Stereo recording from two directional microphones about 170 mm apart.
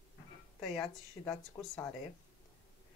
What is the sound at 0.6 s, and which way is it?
A woman's voice, 5° left (ahead or behind).